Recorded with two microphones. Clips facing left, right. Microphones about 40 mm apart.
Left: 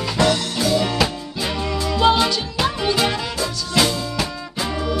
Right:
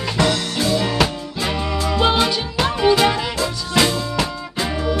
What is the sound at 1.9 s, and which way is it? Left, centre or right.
Music, centre.